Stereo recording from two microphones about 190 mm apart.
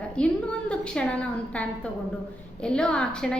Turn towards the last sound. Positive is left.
turn(degrees=5)  # may be behind; listen again after turning